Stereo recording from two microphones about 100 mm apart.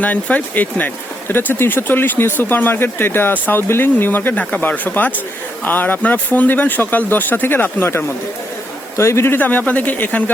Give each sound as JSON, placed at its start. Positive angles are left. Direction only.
{"t": 0.0, "sound": "speech", "side_deg": 15}